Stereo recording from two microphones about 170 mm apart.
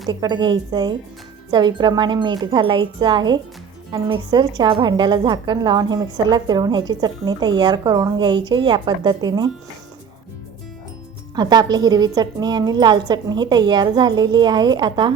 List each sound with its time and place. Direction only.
0.1 s a woman's voice: 25° right (ahead or behind)
11.3 s a woman's voice: 25° right (ahead or behind)